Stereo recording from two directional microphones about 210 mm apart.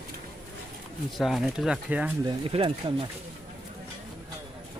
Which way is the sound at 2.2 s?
25° right (ahead or behind).